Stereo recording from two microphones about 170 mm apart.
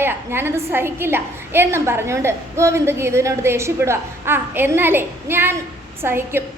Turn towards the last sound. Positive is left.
turn(degrees=-15)  # may be behind; listen again after turning